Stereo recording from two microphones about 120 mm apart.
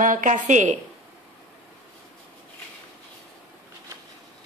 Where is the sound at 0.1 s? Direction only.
90° right.